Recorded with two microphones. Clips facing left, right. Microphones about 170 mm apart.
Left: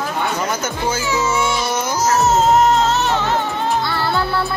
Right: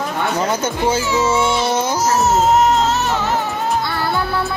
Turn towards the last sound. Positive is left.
turn(degrees=-5)  # may be behind; listen again after turning